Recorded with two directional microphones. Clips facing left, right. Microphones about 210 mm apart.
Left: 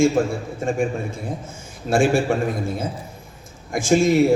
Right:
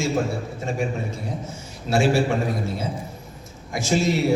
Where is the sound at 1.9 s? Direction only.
50° left (ahead or behind).